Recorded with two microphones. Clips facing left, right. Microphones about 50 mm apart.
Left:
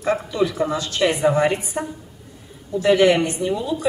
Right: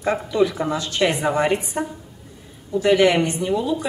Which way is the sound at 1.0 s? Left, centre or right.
Centre.